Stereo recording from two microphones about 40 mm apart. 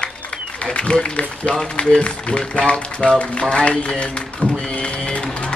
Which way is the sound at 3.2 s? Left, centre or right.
Left.